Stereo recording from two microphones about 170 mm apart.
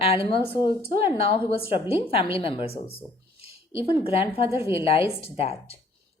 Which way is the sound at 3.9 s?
35° left (ahead or behind).